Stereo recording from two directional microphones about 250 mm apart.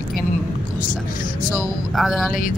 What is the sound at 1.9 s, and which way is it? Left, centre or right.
Speech, centre.